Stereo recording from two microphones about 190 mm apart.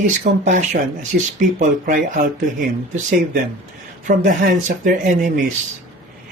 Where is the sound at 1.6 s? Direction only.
45° right (ahead or behind).